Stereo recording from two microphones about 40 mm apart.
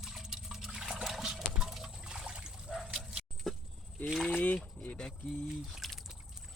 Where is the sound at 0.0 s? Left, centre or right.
Centre.